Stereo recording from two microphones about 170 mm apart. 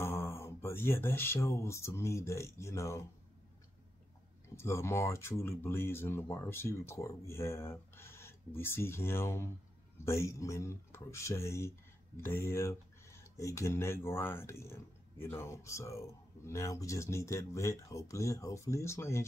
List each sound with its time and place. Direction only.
0.0 s speech: 15° left (ahead or behind)
4.6 s speech: 15° left (ahead or behind)